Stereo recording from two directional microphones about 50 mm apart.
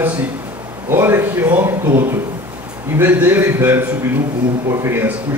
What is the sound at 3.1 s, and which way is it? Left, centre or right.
Speech, right.